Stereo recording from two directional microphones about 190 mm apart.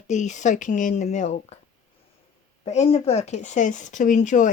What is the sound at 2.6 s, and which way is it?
Speech, 35° left (ahead or behind).